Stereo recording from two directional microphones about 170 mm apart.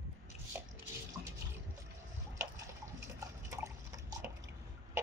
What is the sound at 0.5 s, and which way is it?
Drip, 15° right (ahead or behind).